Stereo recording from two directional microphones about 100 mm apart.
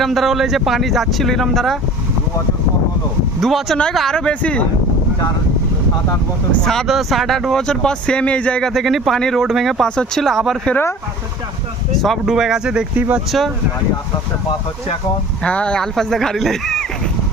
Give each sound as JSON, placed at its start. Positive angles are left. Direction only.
{"t": 0.0, "sound": "speech", "side_deg": 0}
{"t": 3.4, "sound": "speech", "side_deg": 0}
{"t": 6.7, "sound": "speech", "side_deg": 0}
{"t": 8.7, "sound": "speech", "side_deg": 0}
{"t": 12.0, "sound": "speech", "side_deg": 0}
{"t": 15.4, "sound": "speech", "side_deg": 10}